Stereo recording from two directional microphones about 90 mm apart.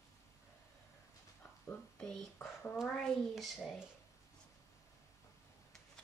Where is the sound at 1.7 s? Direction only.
15° left (ahead or behind).